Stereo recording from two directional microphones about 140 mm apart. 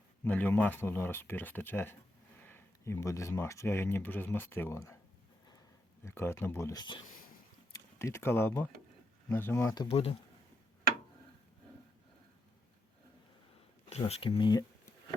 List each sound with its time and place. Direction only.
0.3 s speech: 10° left (ahead or behind)
6.1 s speech: 20° left (ahead or behind)
7.9 s speech: 20° left (ahead or behind)
9.9 s speech: 45° left (ahead or behind)
14.1 s speech: 40° left (ahead or behind)